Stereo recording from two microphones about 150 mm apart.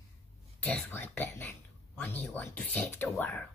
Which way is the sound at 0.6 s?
10° left (ahead or behind).